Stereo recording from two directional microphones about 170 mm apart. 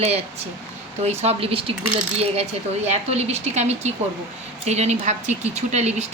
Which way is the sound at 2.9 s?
40° right (ahead or behind).